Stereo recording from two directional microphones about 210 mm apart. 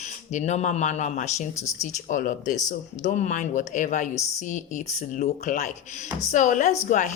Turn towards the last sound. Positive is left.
turn(degrees=35)  # may be behind; listen again after turning